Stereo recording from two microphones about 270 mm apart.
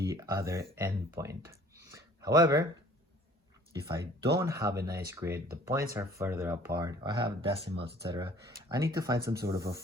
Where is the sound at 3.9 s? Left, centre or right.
Centre.